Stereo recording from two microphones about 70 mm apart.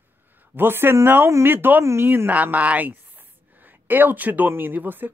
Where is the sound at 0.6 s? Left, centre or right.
Right.